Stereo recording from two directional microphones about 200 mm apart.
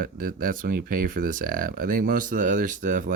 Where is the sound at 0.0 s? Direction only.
45° right (ahead or behind).